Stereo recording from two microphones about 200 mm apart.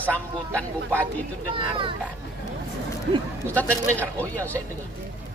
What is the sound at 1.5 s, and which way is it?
Speech, 25° right (ahead or behind).